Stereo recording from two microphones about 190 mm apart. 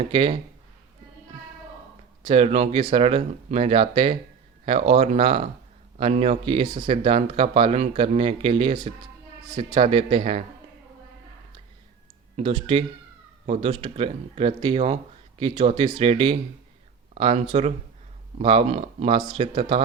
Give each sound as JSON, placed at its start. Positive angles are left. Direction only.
{"t": 0.1, "sound": "speech", "side_deg": -25}
{"t": 2.2, "sound": "speech", "side_deg": -30}
{"t": 12.4, "sound": "speech", "side_deg": -30}